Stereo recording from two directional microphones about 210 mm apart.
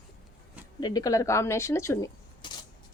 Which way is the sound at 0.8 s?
15° left (ahead or behind).